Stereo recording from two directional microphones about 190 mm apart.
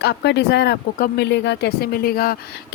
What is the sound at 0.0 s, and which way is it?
Speech, 65° left (ahead or behind).